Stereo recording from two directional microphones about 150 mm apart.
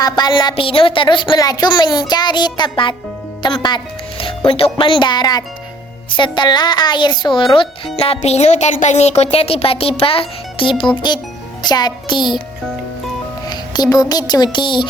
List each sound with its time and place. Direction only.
0.0 s a woman's voice: 30° left (ahead or behind)
11.6 s music: 25° left (ahead or behind)
13.5 s a child's voice: 25° left (ahead or behind)